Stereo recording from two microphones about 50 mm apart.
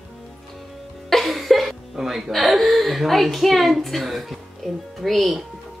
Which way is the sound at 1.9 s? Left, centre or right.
Centre.